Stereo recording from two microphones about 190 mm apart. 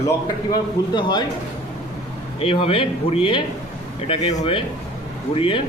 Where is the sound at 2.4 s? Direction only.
30° left (ahead or behind).